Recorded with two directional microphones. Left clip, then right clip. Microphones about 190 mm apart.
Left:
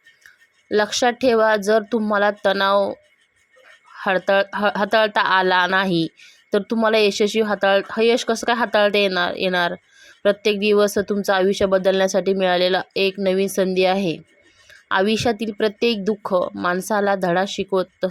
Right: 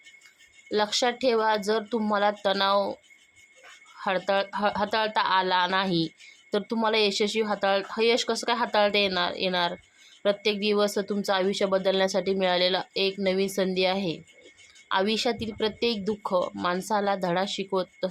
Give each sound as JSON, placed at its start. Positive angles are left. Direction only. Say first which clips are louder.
{"t": 0.7, "sound": "speech", "louder": "left 7 dB", "side_deg": 30}